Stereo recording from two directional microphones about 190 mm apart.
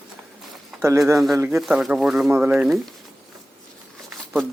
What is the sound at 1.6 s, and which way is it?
Speech, centre (ahead or behind).